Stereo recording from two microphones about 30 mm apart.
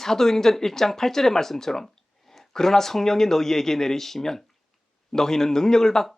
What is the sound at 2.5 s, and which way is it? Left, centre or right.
Speech, centre.